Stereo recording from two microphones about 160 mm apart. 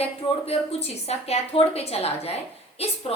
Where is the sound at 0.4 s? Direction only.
40° left (ahead or behind).